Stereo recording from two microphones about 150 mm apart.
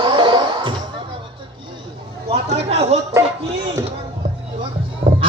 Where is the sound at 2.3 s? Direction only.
45° right (ahead or behind).